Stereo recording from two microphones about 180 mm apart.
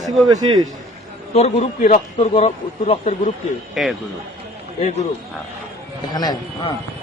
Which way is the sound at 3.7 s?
Centre (ahead or behind).